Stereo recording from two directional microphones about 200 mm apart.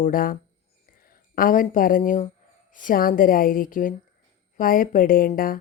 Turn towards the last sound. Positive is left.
turn(degrees=45)  # may be behind; listen again after turning